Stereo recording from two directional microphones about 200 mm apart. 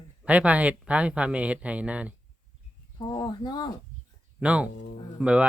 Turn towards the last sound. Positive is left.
turn(degrees=-5)  # may be behind; listen again after turning